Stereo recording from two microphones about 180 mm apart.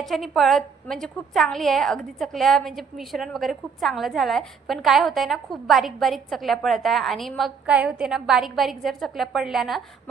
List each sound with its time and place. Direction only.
0.0 s a woman's voice: centre (ahead or behind)